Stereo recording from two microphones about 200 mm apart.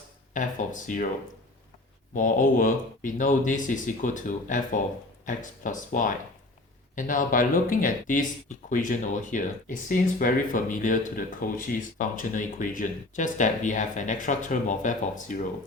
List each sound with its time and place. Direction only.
0.3 s speech: 40° left (ahead or behind)
2.1 s speech: 40° left (ahead or behind)